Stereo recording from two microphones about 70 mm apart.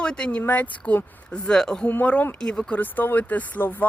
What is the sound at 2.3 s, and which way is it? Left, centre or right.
Speech, centre.